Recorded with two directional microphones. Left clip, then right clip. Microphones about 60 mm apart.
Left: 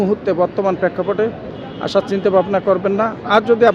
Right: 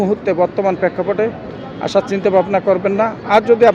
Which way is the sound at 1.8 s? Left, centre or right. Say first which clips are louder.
Right 1 dB; left.